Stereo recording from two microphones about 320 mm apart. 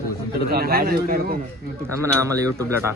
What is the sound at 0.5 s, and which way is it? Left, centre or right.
Speech, right.